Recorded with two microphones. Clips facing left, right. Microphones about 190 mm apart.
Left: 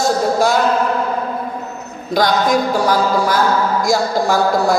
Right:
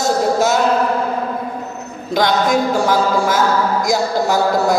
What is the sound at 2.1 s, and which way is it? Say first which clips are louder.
Music: left 1 dB; 25° right (ahead or behind).